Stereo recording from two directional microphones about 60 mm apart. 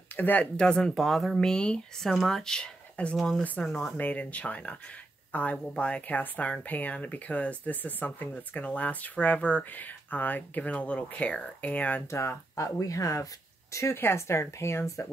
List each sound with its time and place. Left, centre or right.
0.1 s speech: left
0.6 s speech: centre
3.6 s speech: centre
4.0 s speech: left
12.1 s speech: left
13.9 s speech: left